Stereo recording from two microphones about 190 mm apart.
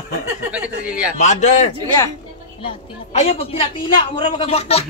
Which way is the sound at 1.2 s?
35° left (ahead or behind).